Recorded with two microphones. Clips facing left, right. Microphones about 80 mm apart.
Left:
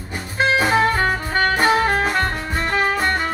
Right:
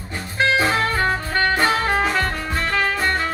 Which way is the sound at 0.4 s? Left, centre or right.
Centre.